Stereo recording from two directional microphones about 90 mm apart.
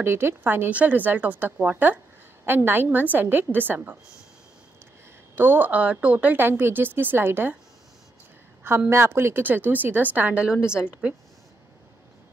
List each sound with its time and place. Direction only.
0.0 s a woman's voice: 25° right (ahead or behind)
5.3 s a woman's voice: 25° right (ahead or behind)
8.6 s a woman's voice: 25° right (ahead or behind); by 11.1 s 10° right (ahead or behind)